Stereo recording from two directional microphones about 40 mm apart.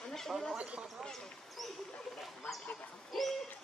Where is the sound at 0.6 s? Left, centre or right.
Right.